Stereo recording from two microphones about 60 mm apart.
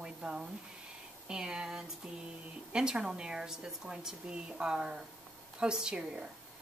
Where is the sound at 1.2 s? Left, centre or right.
Centre.